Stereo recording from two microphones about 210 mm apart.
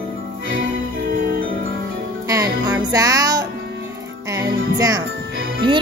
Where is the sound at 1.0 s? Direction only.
45° right (ahead or behind).